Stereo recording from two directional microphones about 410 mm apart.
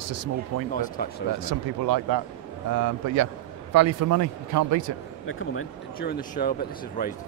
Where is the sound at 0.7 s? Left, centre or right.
Centre.